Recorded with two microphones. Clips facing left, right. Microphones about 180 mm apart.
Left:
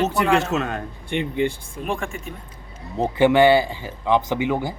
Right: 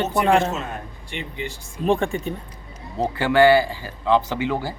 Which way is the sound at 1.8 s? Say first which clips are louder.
Right 7 dB; 35° right (ahead or behind).